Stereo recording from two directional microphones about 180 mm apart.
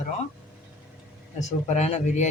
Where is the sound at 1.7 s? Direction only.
40° left (ahead or behind).